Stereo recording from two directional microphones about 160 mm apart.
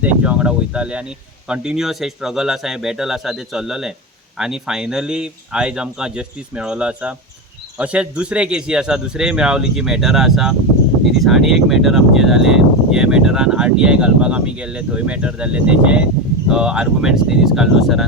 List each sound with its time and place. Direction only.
0.0 s speech: 10° right (ahead or behind)